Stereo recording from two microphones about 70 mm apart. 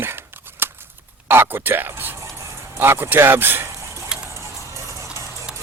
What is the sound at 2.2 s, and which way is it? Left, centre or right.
Music, right.